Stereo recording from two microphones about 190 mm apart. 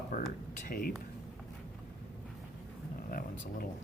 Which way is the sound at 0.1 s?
45° left (ahead or behind).